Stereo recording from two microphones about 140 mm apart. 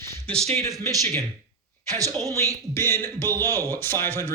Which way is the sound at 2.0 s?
25° right (ahead or behind).